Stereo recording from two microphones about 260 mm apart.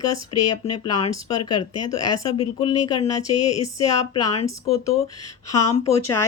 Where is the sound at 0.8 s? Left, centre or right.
Centre.